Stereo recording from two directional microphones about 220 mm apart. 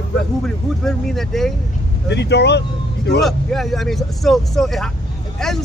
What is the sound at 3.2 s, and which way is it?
Speech, centre (ahead or behind).